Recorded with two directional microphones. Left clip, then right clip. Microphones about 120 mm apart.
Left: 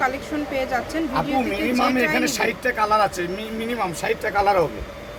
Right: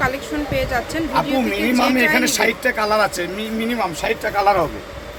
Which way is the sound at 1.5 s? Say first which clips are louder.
Right 3 dB; 45° right (ahead or behind).